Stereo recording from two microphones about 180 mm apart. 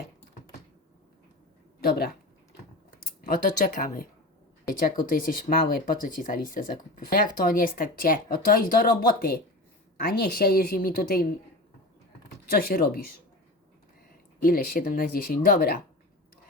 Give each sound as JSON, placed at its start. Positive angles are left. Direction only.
{"t": 1.8, "sound": "speech", "side_deg": 55}
{"t": 12.5, "sound": "speech", "side_deg": 55}
{"t": 14.3, "sound": "speech", "side_deg": 55}